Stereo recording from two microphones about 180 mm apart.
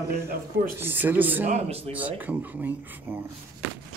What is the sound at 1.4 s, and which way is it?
Speech, 35° right (ahead or behind).